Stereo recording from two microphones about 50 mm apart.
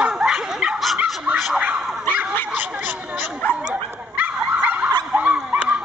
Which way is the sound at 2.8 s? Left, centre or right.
Right.